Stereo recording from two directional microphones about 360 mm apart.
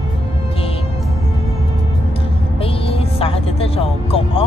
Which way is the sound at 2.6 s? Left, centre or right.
Centre.